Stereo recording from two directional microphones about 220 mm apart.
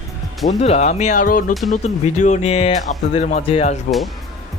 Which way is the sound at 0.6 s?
30° left (ahead or behind).